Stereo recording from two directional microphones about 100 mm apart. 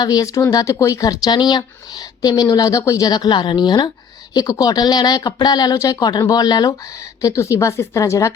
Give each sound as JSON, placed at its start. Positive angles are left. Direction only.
{"t": 0.0, "sound": "a woman's voice", "side_deg": 40}